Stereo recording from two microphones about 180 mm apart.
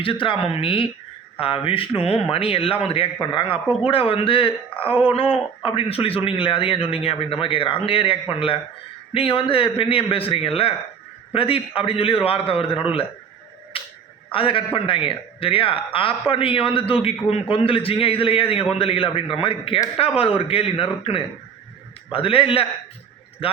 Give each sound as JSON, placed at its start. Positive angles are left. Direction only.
{"t": 0.0, "sound": "a man's voice", "side_deg": 30}
{"t": 13.7, "sound": "a sound", "side_deg": 30}
{"t": 14.3, "sound": "a man's voice", "side_deg": 30}